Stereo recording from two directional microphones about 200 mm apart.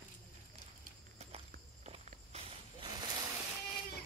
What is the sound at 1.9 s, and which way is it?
Walk, 30° right (ahead or behind).